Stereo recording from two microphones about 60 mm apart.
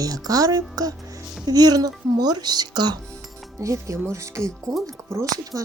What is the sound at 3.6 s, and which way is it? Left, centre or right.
A woman's voice, right.